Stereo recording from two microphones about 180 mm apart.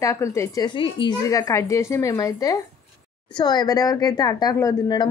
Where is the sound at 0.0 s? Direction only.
15° left (ahead or behind).